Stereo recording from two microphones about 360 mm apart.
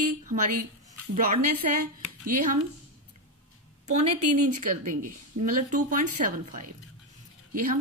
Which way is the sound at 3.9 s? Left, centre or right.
Centre.